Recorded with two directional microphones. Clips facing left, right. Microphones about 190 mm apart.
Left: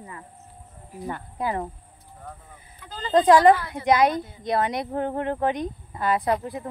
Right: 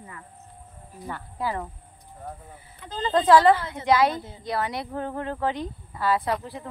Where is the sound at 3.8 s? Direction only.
20° left (ahead or behind).